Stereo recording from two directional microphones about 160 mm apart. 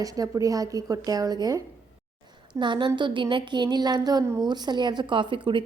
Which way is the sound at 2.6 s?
30° right (ahead or behind).